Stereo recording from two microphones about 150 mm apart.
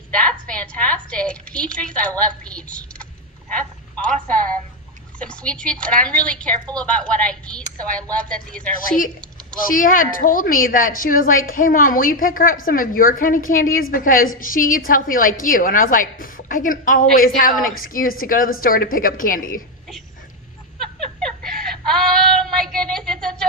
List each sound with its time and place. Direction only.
0.1 s a woman's voice: 10° left (ahead or behind)
9.6 s a woman's voice: 65° left (ahead or behind)
20.8 s child singing: 5° left (ahead or behind)